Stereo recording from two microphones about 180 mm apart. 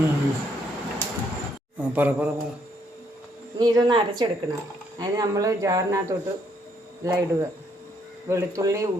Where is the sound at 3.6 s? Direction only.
25° right (ahead or behind).